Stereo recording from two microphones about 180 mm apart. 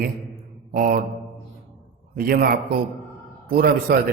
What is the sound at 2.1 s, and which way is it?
A man's voice, 55° right (ahead or behind).